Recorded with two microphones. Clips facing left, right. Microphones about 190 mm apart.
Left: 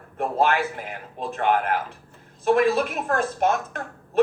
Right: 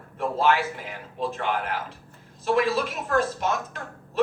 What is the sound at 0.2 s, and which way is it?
A woman's voice, 55° left (ahead or behind).